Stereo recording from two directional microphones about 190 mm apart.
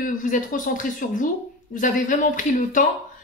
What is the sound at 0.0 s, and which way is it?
A woman's voice, 45° left (ahead or behind).